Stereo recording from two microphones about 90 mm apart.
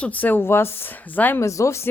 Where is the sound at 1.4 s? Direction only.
35° left (ahead or behind).